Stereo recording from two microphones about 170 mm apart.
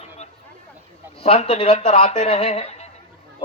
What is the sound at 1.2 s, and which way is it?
A man's voice, 35° left (ahead or behind).